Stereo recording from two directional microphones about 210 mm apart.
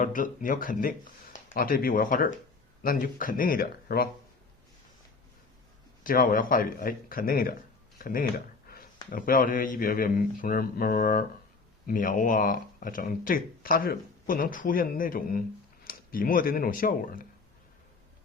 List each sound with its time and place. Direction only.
0.0 s speech: 40° left (ahead or behind)
6.0 s speech: 40° left (ahead or behind)